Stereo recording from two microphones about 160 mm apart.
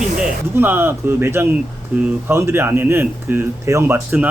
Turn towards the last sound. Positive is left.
turn(degrees=-10)  # may be behind; listen again after turning